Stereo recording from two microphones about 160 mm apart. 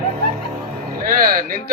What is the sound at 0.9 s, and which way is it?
Speech, 60° right (ahead or behind).